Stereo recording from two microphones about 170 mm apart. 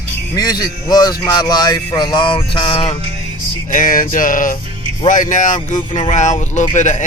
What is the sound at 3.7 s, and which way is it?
Speech, 55° left (ahead or behind).